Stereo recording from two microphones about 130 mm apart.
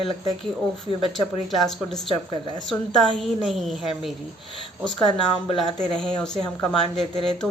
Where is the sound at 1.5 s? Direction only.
Centre (ahead or behind).